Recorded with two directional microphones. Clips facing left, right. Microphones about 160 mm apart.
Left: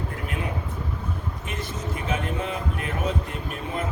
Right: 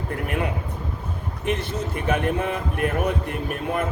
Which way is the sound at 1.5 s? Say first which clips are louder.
Right 8 dB; 65° right (ahead or behind).